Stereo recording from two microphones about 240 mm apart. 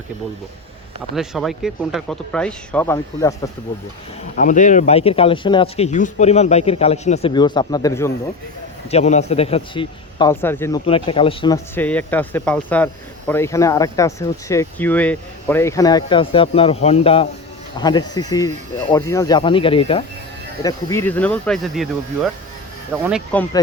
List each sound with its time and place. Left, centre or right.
1.1 s speech: centre
4.4 s speech: left; by 8.1 s centre
8.9 s speech: left; by 10.8 s centre
10.8 s speech: left; by 22.3 s centre
23.3 s speech: centre